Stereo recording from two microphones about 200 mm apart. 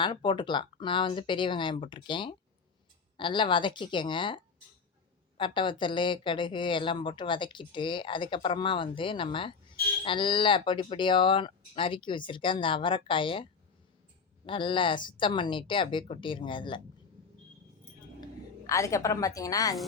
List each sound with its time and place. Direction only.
0.0 s speech: 25° left (ahead or behind)
5.4 s speech: 25° left (ahead or behind)
18.2 s a woman's voice: 15° left (ahead or behind)